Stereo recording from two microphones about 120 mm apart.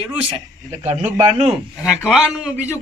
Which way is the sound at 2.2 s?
15° right (ahead or behind).